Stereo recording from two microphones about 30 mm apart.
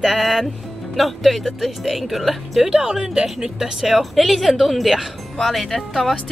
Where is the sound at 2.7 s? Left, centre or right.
Centre.